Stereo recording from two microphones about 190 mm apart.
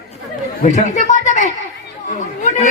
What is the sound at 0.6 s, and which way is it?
A man's voice, 40° left (ahead or behind).